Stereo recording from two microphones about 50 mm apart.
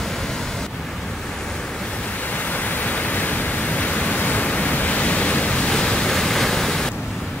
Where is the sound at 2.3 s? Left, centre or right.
Left; by 6.9 s centre.